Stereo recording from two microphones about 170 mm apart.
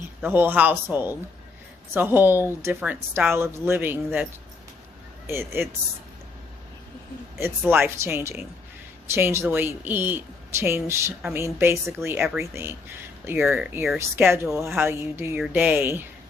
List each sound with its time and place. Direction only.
0.2 s a woman's voice: 10° right (ahead or behind)
7.4 s a woman's voice: 10° right (ahead or behind)